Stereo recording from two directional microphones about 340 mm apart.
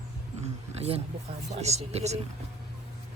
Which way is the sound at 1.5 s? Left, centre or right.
Centre.